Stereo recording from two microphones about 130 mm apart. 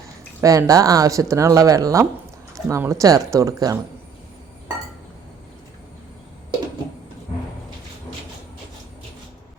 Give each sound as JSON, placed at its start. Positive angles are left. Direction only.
{"t": 0.4, "sound": "speech", "side_deg": -25}